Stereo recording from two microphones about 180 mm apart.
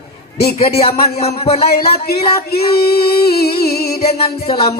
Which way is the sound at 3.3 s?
60° left (ahead or behind).